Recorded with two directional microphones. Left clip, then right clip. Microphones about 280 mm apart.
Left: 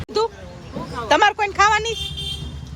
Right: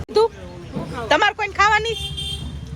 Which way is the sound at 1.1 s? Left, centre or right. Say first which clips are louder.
Left 2 dB; centre.